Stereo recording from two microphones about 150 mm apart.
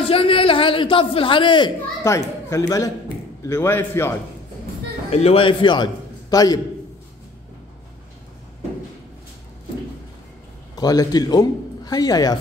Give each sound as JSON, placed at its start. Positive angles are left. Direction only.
{"t": 0.0, "sound": "a sound", "side_deg": 35}
{"t": 2.0, "sound": "a man's voice", "side_deg": 20}
{"t": 5.1, "sound": "a man's voice", "side_deg": 40}
{"t": 10.8, "sound": "a man's voice", "side_deg": 25}